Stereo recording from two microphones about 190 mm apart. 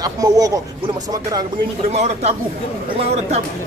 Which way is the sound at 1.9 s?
35° right (ahead or behind).